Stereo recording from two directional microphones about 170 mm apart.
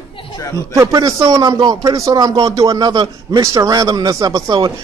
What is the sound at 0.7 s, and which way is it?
A man's voice, 20° right (ahead or behind).